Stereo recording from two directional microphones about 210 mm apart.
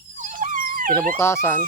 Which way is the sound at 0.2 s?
40° right (ahead or behind).